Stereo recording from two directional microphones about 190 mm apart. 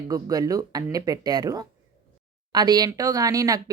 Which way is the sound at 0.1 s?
20° right (ahead or behind).